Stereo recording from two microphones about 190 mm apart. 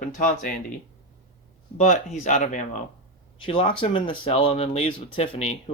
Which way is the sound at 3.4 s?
30° left (ahead or behind).